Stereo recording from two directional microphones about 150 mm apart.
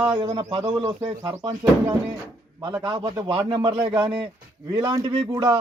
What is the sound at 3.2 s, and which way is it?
A man's voice, 30° right (ahead or behind).